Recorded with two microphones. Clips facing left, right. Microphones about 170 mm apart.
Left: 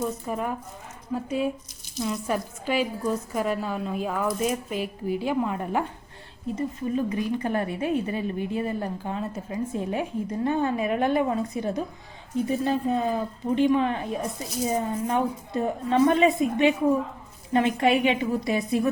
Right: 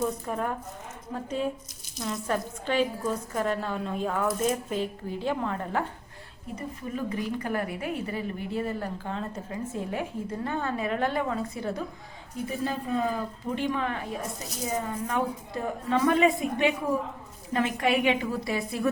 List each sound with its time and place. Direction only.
0.0 s a woman's voice: 5° left (ahead or behind)